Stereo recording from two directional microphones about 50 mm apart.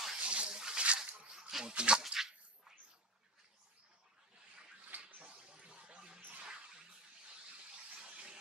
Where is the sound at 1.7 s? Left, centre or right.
Centre.